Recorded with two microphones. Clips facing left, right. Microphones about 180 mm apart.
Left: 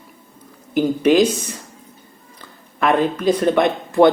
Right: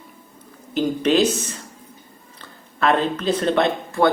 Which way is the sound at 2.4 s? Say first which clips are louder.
Left 1 dB; 15° left (ahead or behind).